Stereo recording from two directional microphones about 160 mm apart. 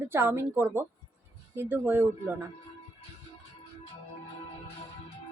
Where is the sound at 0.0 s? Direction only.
15° right (ahead or behind).